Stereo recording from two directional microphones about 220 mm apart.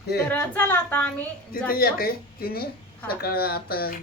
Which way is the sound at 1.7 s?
45° left (ahead or behind).